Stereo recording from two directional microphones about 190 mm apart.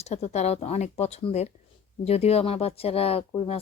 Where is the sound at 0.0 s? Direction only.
35° left (ahead or behind).